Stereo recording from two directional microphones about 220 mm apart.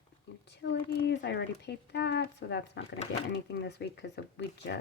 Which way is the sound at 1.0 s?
50° left (ahead or behind).